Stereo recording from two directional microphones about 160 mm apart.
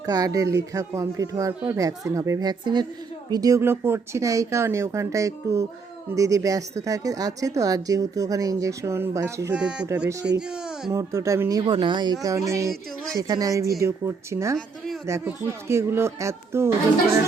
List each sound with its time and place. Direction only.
0.0 s a woman's voice: 20° right (ahead or behind)
9.6 s a woman's voice: 5° right (ahead or behind)